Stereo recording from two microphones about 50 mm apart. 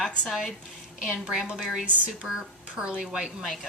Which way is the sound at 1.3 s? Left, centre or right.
Centre.